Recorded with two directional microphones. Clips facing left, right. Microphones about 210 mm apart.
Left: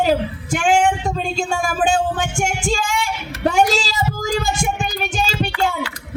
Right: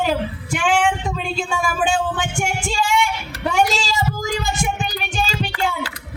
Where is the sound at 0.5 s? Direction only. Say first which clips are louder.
Left 3 dB; 45° left (ahead or behind).